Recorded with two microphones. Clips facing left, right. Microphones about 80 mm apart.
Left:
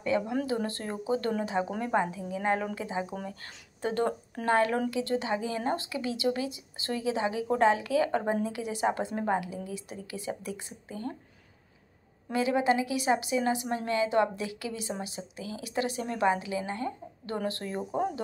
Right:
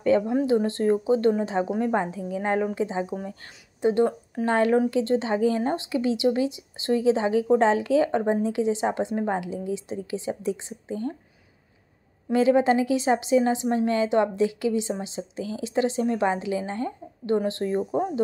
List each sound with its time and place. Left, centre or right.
0.3 s a woman's voice: right
12.3 s a woman's voice: right